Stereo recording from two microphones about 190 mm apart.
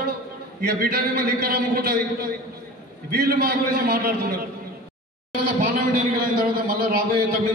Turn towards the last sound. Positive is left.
turn(degrees=-50)  # may be behind; listen again after turning